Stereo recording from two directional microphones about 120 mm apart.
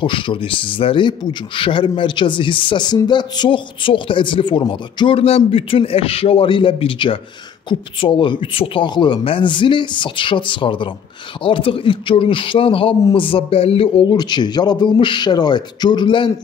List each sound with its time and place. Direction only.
0.0 s a man's voice: 45° left (ahead or behind)
14.0 s speech: 35° left (ahead or behind)